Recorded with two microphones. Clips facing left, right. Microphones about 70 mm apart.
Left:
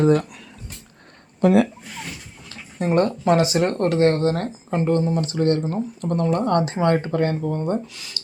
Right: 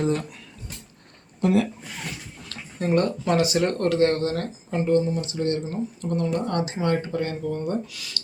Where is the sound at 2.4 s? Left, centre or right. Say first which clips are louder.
Left 2 dB; left.